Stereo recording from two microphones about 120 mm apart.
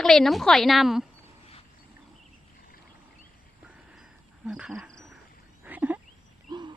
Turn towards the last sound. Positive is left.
turn(degrees=-15)  # may be behind; listen again after turning